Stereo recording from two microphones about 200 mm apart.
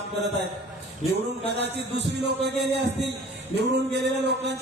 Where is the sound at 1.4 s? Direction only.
55° right (ahead or behind).